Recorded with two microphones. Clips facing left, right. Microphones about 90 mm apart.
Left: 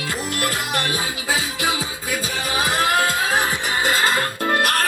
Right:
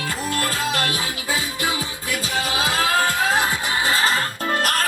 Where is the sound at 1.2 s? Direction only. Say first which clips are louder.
Left 2 dB; 90° left.